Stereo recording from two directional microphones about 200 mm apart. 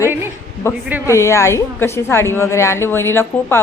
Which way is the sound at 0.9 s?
10° right (ahead or behind).